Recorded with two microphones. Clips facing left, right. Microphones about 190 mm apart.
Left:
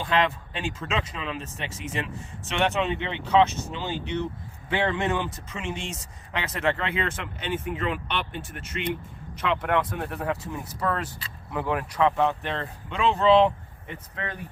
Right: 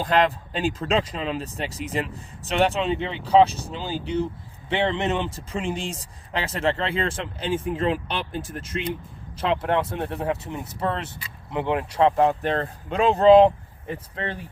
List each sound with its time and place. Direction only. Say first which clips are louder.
0.0 s speech: right 4 dB; 40° right (ahead or behind)
9.4 s speech: right 2 dB; 30° right (ahead or behind)